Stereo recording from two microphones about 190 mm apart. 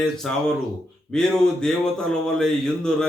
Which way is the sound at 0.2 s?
5° left (ahead or behind).